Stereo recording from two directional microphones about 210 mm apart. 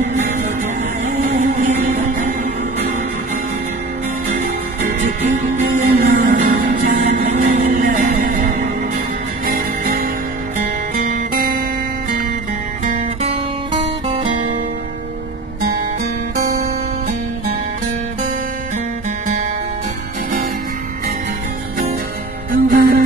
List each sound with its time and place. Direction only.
1.0 s music: 35° right (ahead or behind)
5.0 s music: 35° right (ahead or behind)
14.0 s music: 25° right (ahead or behind)
22.5 s music: 40° right (ahead or behind)